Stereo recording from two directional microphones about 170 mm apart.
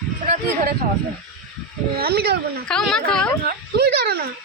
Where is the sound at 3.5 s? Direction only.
70° right (ahead or behind).